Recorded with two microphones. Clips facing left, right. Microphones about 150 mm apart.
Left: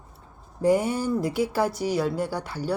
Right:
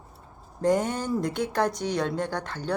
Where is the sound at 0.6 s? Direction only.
10° left (ahead or behind).